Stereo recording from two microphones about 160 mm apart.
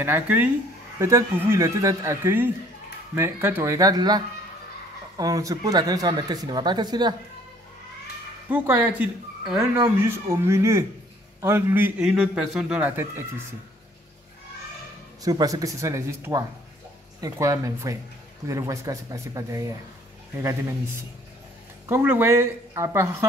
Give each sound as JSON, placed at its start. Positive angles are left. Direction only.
{"t": 0.0, "sound": "a man's voice", "side_deg": -10}
{"t": 8.5, "sound": "a man's voice", "side_deg": -10}
{"t": 15.2, "sound": "speech", "side_deg": -20}
{"t": 21.8, "sound": "a man's voice", "side_deg": -15}